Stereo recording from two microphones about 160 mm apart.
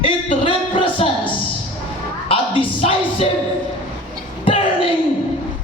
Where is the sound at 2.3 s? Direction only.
35° left (ahead or behind).